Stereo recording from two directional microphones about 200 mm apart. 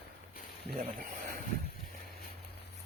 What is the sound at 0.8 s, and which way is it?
Speech, 45° right (ahead or behind).